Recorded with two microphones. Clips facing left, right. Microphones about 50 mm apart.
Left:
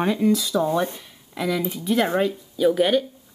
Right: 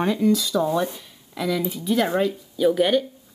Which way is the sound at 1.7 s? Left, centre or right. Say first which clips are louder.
Left 1 dB; centre.